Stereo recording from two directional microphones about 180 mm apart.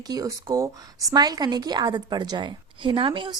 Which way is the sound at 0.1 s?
20° right (ahead or behind).